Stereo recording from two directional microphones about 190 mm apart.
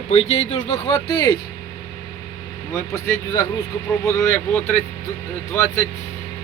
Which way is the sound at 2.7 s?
20° left (ahead or behind).